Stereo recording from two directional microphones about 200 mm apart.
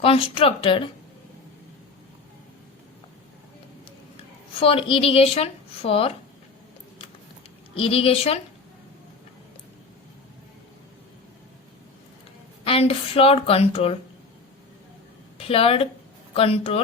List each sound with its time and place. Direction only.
0.0 s a woman's voice: 30° left (ahead or behind)
4.6 s a woman's voice: 30° left (ahead or behind)
7.8 s a woman's voice: 30° left (ahead or behind)
12.6 s a woman's voice: 30° left (ahead or behind)
15.4 s a woman's voice: 30° left (ahead or behind)